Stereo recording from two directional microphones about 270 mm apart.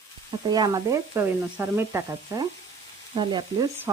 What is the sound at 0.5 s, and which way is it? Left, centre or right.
Frying, centre.